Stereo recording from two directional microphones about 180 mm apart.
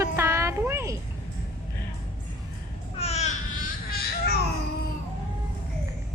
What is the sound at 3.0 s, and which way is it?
Babbling, 35° left (ahead or behind).